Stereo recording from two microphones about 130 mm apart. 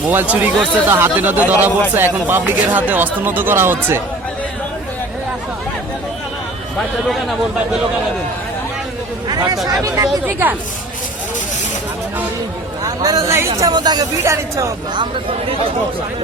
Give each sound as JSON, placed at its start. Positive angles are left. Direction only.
{"t": 0.1, "sound": "speech", "side_deg": -15}
{"t": 9.3, "sound": "a sound", "side_deg": -30}
{"t": 9.8, "sound": "speech", "side_deg": -25}
{"t": 12.8, "sound": "a man's voice", "side_deg": -30}
{"t": 14.9, "sound": "speech", "side_deg": -45}